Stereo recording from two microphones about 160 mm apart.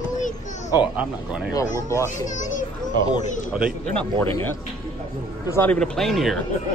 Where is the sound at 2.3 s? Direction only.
50° left (ahead or behind).